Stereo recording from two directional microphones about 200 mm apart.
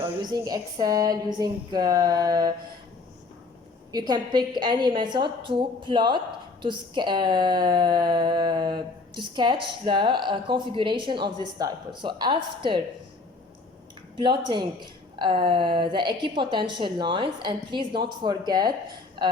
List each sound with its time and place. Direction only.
0.2 s a woman's voice: 20° right (ahead or behind)
3.9 s a woman's voice: 20° right (ahead or behind)
14.2 s a woman's voice: 25° right (ahead or behind)